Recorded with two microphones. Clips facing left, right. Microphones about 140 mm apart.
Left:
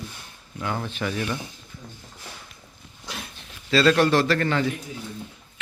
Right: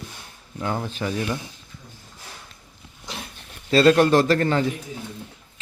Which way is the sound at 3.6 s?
40° right (ahead or behind).